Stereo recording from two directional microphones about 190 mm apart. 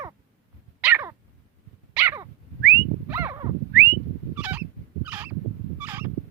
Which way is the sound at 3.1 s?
10° right (ahead or behind).